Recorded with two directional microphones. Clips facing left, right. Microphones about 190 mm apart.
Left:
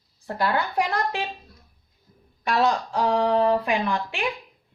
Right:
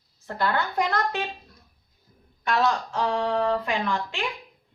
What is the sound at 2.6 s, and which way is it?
A woman's voice, 15° left (ahead or behind).